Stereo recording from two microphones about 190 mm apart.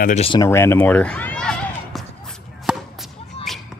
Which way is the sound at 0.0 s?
35° left (ahead or behind).